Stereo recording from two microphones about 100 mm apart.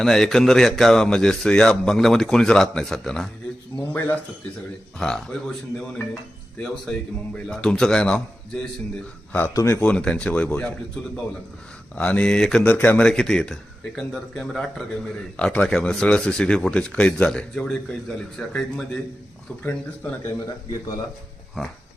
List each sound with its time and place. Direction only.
0.0 s speech: 5° left (ahead or behind)
3.8 s speech: 20° left (ahead or behind)
4.9 s speech: 5° left (ahead or behind)
7.4 s a man's voice: 5° left (ahead or behind)
9.5 s speech: 30° left (ahead or behind)
9.8 s a man's voice: 10° left (ahead or behind)
11.9 s a man's voice: 15° left (ahead or behind)
19.6 s a man's voice: 15° left (ahead or behind)
21.6 s speech: centre (ahead or behind)